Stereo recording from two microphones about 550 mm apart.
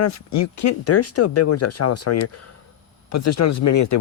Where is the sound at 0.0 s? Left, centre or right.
Left.